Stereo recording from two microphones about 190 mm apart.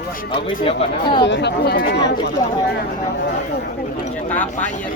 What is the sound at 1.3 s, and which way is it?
Speech, 65° left (ahead or behind).